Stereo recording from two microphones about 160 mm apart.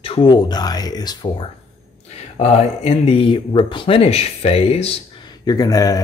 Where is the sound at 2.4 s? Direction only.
40° left (ahead or behind).